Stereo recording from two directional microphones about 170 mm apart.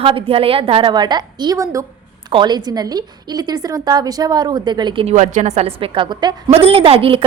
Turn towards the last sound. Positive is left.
turn(degrees=-35)  # may be behind; listen again after turning